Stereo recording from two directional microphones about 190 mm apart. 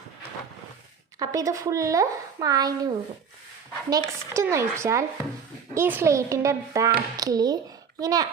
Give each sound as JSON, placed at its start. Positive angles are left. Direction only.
{"t": 1.2, "sound": "speech", "side_deg": -20}